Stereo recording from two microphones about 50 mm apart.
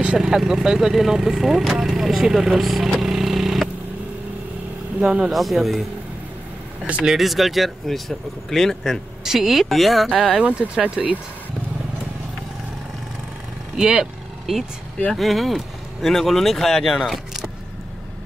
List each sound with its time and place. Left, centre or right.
0.2 s speech: centre
3.0 s vehicle: centre
5.0 s speech: centre
5.3 s speech: centre
7.1 s speech: centre
9.2 s speech: centre
10.7 s speech: right
13.7 s speech: centre
15.1 s speech: centre